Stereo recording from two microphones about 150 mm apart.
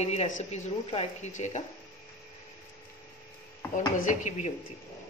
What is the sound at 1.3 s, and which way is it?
Speech, 50° left (ahead or behind).